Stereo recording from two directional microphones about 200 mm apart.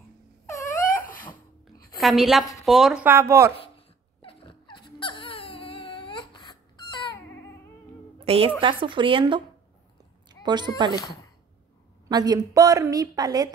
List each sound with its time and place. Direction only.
2.0 s a woman's voice: centre (ahead or behind)
4.2 s a sound: 25° left (ahead or behind)
7.2 s cat: 10° left (ahead or behind)
8.3 s a woman's voice: 25° right (ahead or behind)
12.1 s a woman's voice: 20° right (ahead or behind)